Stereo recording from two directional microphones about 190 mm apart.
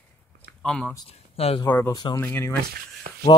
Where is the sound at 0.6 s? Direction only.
5° left (ahead or behind).